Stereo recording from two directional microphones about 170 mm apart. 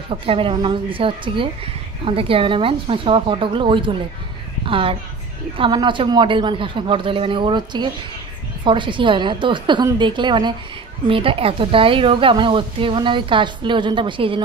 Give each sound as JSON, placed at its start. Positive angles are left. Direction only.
{"t": 0.1, "sound": "a woman's voice", "side_deg": -30}